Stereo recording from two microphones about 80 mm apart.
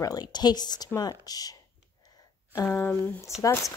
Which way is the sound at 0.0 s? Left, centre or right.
Left.